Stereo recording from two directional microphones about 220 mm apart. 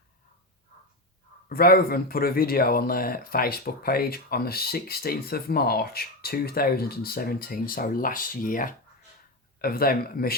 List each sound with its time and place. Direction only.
1.5 s speech: 45° left (ahead or behind)